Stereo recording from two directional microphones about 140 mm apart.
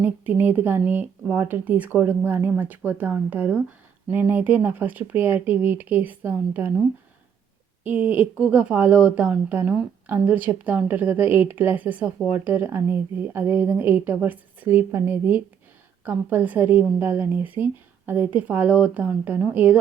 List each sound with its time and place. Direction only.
0.0 s a woman's voice: 15° right (ahead or behind)
7.9 s a woman's voice: 10° right (ahead or behind)